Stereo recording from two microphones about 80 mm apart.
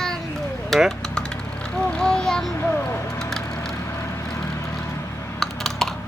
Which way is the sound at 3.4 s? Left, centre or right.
Left.